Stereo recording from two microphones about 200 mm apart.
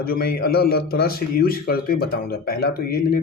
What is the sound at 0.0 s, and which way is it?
Speech, 50° left (ahead or behind).